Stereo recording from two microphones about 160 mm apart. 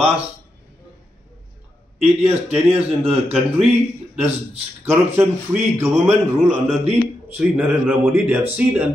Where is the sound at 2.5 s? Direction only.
10° right (ahead or behind).